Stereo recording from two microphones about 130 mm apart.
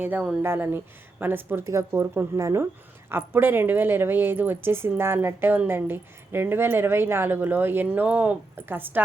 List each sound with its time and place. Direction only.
0.0 s a woman's voice: 10° right (ahead or behind)